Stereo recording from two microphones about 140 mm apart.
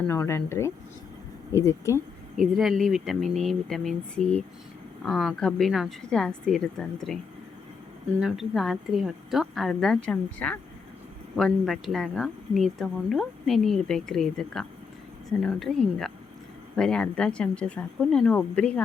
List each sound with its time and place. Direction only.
0.1 s speech: 15° left (ahead or behind)
2.6 s speech: centre (ahead or behind)
8.2 s speech: centre (ahead or behind)